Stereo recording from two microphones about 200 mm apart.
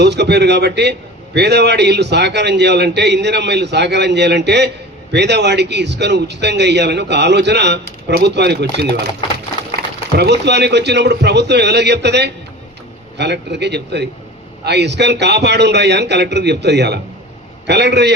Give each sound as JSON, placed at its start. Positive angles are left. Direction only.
{"t": 0.0, "sound": "a man's voice", "side_deg": -60}
{"t": 10.2, "sound": "a man's voice", "side_deg": -60}